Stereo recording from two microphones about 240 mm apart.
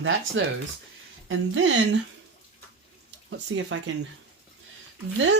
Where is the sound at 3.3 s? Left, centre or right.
Right.